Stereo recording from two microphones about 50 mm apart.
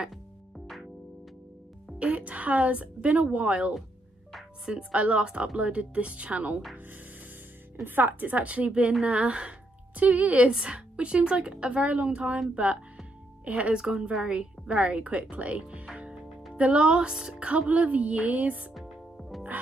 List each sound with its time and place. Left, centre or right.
2.0 s a woman's voice: right
4.9 s a woman's voice: right
7.7 s a woman's voice: right
13.5 s a woman's voice: right
17.1 s music: centre
17.4 s a woman's voice: right
18.8 s music: centre